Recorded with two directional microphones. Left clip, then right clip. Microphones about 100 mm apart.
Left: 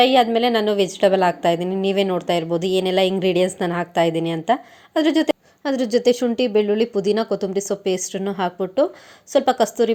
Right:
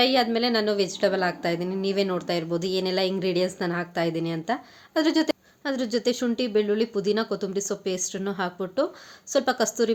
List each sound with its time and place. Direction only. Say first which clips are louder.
0.0 s a woman's voice: left 7 dB; 35° left (ahead or behind)